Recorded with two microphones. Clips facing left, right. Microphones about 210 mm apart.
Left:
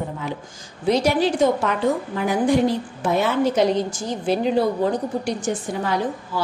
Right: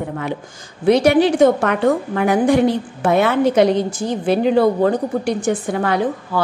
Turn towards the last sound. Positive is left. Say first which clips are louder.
# right 5 dB
turn(degrees=-60)  # may be behind; listen again after turning